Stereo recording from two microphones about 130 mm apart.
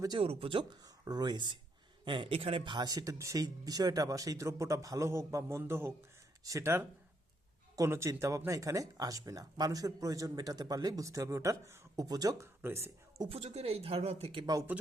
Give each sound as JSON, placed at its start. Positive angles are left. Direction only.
{"t": 0.2, "sound": "speech", "side_deg": -50}
{"t": 0.9, "sound": "speech", "side_deg": -30}
{"t": 13.3, "sound": "speech", "side_deg": -50}
{"t": 14.3, "sound": "speech", "side_deg": -30}